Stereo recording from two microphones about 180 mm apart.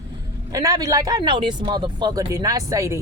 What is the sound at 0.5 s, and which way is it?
Speech, 20° right (ahead or behind).